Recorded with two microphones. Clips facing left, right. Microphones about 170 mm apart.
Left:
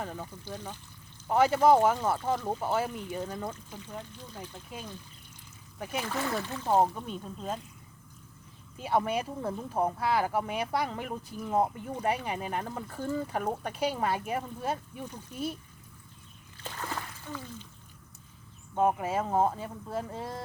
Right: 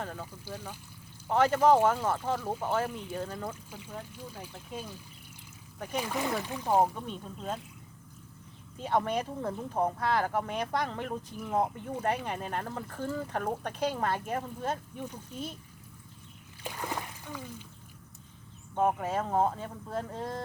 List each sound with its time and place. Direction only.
0.0 s speech: 10° left (ahead or behind)
0.3 s speech: 10° right (ahead or behind)
1.3 s speech: 10° left (ahead or behind)
3.3 s speech: 10° right (ahead or behind)
6.9 s speech: 5° left (ahead or behind)
8.8 s speech: 5° left (ahead or behind)
16.6 s a sound: 15° right (ahead or behind)
18.7 s speech: 5° left (ahead or behind)